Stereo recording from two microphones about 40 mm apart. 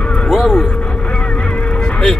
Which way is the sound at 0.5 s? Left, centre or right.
Left.